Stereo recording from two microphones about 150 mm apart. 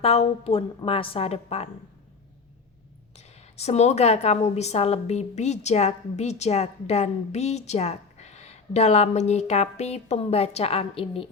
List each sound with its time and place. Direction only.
0.0 s a woman's voice: 40° left (ahead or behind)
3.2 s a woman's voice: 45° left (ahead or behind)